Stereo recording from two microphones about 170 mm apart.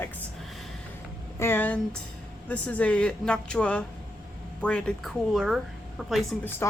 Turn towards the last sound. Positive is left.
turn(degrees=15)  # may be behind; listen again after turning